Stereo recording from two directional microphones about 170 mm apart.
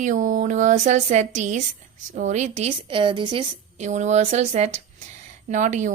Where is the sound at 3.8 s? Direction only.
45° right (ahead or behind).